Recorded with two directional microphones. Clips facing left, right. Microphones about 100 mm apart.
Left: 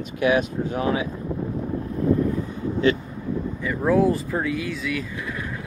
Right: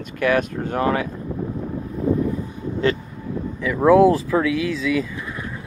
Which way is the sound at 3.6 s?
90° right.